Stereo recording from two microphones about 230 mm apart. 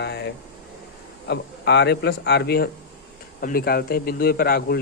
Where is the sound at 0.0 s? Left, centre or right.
Left.